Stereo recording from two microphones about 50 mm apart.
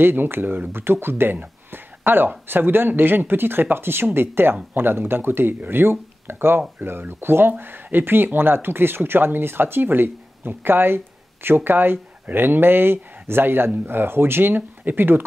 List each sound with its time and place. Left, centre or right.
0.0 s speech: right